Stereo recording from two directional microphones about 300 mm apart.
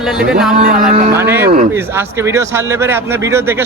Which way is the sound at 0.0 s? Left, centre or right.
Centre.